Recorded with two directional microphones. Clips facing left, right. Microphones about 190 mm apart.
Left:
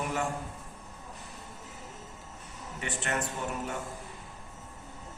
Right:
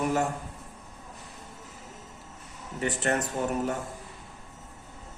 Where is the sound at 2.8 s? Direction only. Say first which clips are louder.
Right 6 dB; 40° right (ahead or behind).